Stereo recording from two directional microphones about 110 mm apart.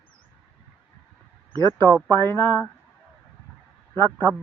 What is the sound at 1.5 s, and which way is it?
A woman's voice, 45° right (ahead or behind).